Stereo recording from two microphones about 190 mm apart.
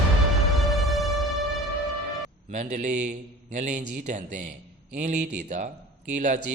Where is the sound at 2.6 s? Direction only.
40° right (ahead or behind).